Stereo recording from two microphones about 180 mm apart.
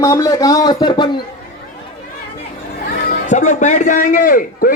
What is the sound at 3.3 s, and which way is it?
A man's voice, 45° left (ahead or behind).